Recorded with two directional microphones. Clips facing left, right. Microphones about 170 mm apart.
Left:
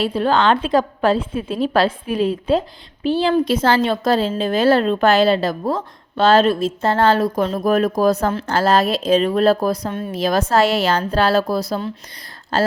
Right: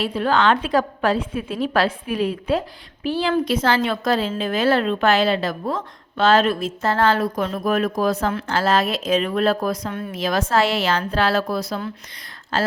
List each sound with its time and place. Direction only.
0.0 s a woman's voice: 30° left (ahead or behind)